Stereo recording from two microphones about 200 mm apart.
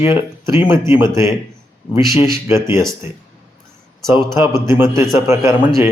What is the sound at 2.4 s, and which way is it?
Speech, 15° right (ahead or behind).